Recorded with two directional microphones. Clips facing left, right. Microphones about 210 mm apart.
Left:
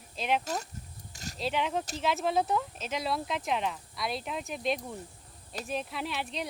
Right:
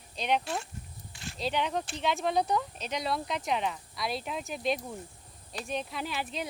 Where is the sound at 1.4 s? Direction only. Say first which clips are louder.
Even; centre (ahead or behind).